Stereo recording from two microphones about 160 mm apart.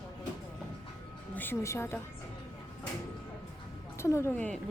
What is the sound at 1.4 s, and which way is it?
Speech, 15° left (ahead or behind).